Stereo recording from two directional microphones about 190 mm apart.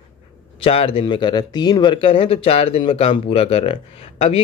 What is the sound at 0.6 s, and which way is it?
Speech, 30° left (ahead or behind).